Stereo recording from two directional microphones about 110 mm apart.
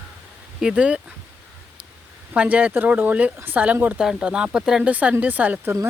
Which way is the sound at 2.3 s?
15° right (ahead or behind).